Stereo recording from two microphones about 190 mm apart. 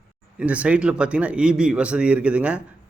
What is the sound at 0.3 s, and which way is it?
A man's voice, 5° right (ahead or behind).